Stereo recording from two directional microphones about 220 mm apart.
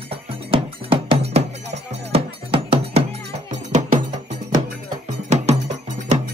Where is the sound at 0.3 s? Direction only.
25° right (ahead or behind).